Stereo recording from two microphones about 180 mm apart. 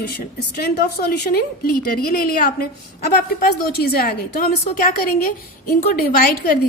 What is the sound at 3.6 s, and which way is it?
A woman's voice, 55° left (ahead or behind).